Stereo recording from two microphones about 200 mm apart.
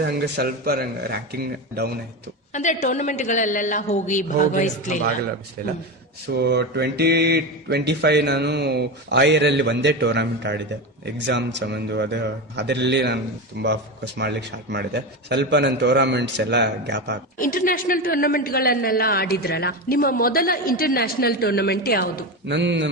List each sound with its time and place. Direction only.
0.1 s a man's voice: 55° right (ahead or behind)
2.5 s a woman's voice: 35° left (ahead or behind)
5.6 s a man's voice: 45° right (ahead or behind)
6.3 s speech: 55° right (ahead or behind)
17.3 s a man's voice: 45° left (ahead or behind)
22.4 s speech: 60° right (ahead or behind)